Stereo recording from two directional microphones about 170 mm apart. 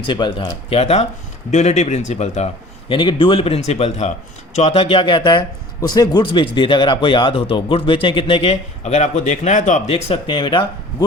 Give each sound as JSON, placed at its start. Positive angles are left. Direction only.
{"t": 0.0, "sound": "speech", "side_deg": 30}
{"t": 2.9, "sound": "a man's voice", "side_deg": 30}